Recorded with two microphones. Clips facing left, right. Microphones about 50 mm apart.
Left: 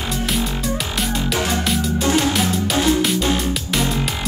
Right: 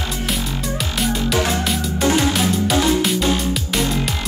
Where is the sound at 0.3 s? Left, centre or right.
Centre.